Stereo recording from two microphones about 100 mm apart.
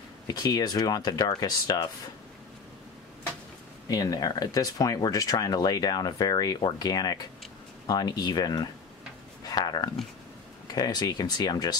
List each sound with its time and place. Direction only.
0.3 s speech: 40° left (ahead or behind)
3.9 s speech: 40° left (ahead or behind)
9.4 s a sound: 40° left (ahead or behind)
10.7 s speech: 45° left (ahead or behind)